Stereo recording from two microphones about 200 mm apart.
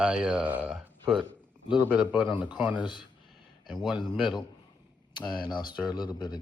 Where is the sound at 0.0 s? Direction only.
5° right (ahead or behind).